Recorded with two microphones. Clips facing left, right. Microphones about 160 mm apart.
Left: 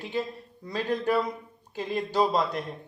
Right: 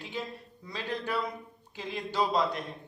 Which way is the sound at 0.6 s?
45° left (ahead or behind).